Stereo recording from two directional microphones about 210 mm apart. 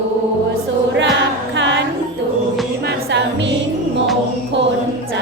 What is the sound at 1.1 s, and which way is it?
Music, 55° right (ahead or behind).